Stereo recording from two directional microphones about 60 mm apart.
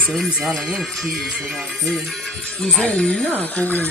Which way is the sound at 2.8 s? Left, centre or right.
Left.